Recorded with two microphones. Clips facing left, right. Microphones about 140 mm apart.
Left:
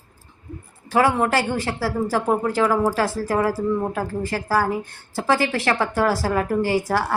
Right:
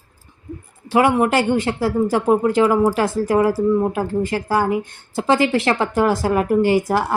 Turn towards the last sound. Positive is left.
turn(degrees=-20)  # may be behind; listen again after turning